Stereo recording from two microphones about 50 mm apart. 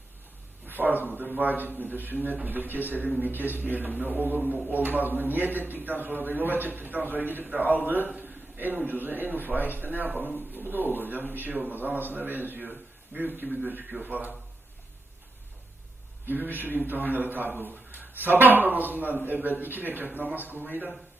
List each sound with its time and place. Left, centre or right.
0.7 s a sound: right
1.0 s a man's voice: right
10.1 s a man's voice: right
16.2 s a man's voice: right